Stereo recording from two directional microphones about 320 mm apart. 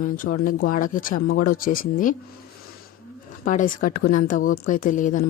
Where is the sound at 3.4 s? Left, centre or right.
Left.